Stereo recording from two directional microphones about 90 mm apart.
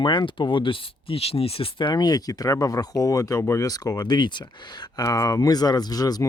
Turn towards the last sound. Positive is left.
turn(degrees=45)  # may be behind; listen again after turning